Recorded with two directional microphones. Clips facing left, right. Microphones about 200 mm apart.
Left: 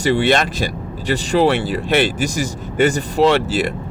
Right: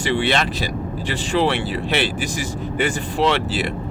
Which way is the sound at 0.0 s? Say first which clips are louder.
Left 4 dB; 40° left (ahead or behind).